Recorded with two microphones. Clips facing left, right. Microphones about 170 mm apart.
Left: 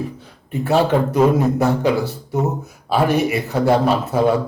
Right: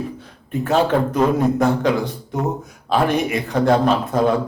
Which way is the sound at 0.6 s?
10° left (ahead or behind).